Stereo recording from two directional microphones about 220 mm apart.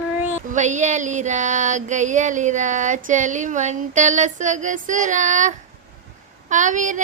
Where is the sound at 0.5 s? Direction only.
35° right (ahead or behind).